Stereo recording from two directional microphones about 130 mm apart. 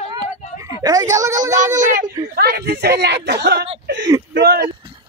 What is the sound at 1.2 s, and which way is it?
Speech, 25° right (ahead or behind).